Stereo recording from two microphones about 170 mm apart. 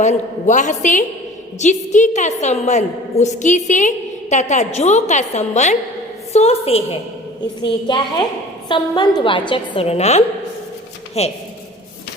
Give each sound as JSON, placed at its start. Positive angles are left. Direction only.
{"t": 0.0, "sound": "a woman's voice", "side_deg": 45}